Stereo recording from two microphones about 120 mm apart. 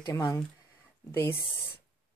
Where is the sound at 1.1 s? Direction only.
20° left (ahead or behind).